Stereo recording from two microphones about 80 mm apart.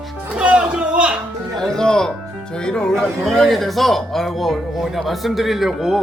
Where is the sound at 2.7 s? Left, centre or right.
Centre.